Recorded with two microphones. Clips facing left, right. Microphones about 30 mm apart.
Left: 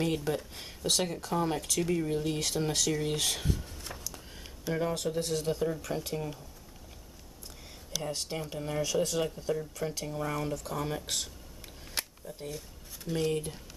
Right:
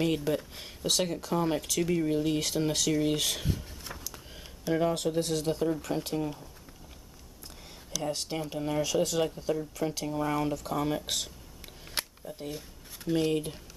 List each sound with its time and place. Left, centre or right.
0.0 s speech: centre
8.0 s speech: centre
11.9 s a sound: centre
12.4 s speech: centre